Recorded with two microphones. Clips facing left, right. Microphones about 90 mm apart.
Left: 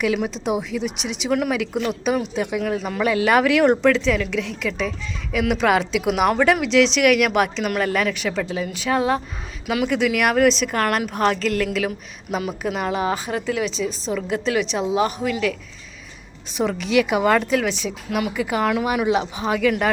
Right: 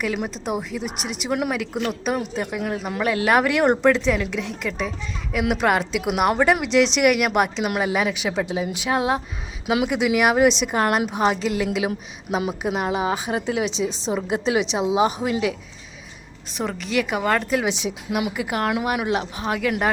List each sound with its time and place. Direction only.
0.0 s a woman's voice: centre (ahead or behind); by 15.5 s 20° right (ahead or behind)
16.6 s speech: centre (ahead or behind)
17.6 s a woman's voice: 15° right (ahead or behind)